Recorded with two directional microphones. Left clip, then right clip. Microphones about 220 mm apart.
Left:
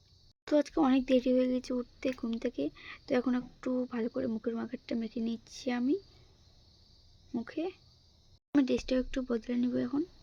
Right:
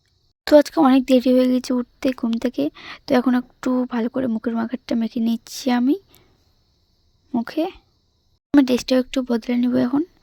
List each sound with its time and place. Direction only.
0.4 s speech: 45° right (ahead or behind)
7.3 s speech: 45° right (ahead or behind)